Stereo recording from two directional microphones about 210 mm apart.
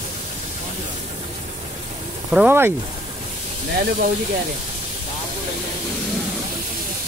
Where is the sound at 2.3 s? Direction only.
5° right (ahead or behind).